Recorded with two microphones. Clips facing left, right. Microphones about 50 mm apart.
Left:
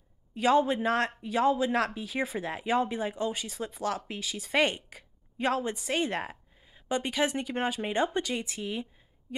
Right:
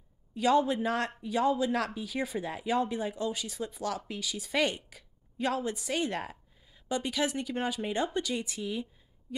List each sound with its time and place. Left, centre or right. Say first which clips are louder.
0.3 s speech: left 1 dB; left